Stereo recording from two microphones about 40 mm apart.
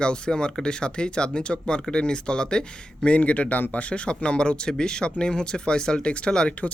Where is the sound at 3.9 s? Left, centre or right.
Left.